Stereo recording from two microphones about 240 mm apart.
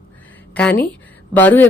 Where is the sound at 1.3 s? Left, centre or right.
Centre.